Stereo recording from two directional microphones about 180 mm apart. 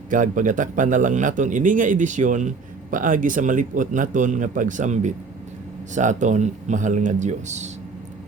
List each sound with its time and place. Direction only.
0.1 s a man's voice: 45° right (ahead or behind)